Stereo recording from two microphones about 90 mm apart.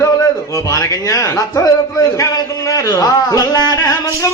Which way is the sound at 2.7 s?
45° left (ahead or behind).